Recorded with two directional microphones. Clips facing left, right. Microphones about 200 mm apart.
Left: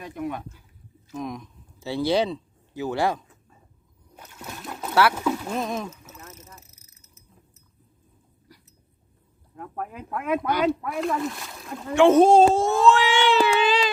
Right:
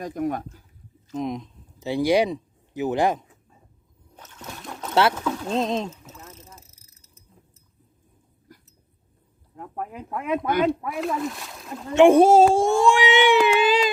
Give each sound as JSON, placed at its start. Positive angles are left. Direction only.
{"t": 0.0, "sound": "speech", "side_deg": -45}
{"t": 1.1, "sound": "speech", "side_deg": -20}
{"t": 4.1, "sound": "splash", "side_deg": 10}
{"t": 5.1, "sound": "speech", "side_deg": 10}
{"t": 5.5, "sound": "speech", "side_deg": -20}
{"t": 6.5, "sound": "a sound", "side_deg": -30}
{"t": 9.6, "sound": "speech", "side_deg": -20}
{"t": 10.8, "sound": "speech", "side_deg": 0}
{"t": 11.9, "sound": "speech", "side_deg": -15}
{"t": 12.5, "sound": "a sound", "side_deg": -15}